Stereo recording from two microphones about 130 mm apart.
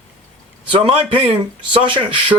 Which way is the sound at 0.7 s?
45° right (ahead or behind).